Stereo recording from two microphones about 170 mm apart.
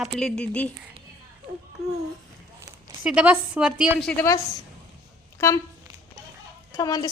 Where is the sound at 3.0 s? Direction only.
5° right (ahead or behind).